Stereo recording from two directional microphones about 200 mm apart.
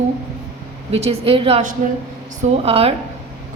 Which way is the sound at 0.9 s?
30° right (ahead or behind).